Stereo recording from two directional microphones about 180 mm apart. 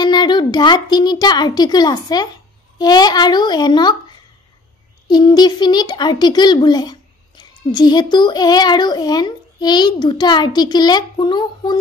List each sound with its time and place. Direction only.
0.0 s a child's voice: 25° left (ahead or behind)
5.0 s a child's voice: 25° left (ahead or behind)